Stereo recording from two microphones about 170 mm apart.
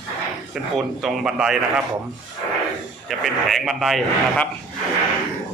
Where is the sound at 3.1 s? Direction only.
Centre (ahead or behind).